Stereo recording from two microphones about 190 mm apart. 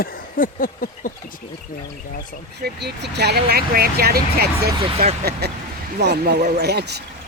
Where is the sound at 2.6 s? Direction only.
60° right (ahead or behind).